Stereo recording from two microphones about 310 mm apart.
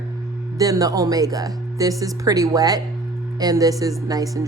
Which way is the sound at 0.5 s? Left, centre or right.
Centre.